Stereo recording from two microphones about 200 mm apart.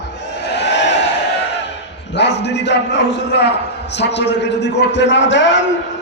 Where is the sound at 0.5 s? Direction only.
60° left (ahead or behind).